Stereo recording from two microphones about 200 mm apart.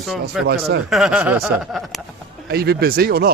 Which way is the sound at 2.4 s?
55° right (ahead or behind).